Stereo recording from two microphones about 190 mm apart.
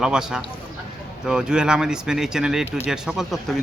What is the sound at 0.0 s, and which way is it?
Speech, 5° right (ahead or behind).